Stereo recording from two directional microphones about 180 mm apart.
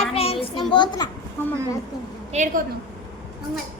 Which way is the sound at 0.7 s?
25° left (ahead or behind).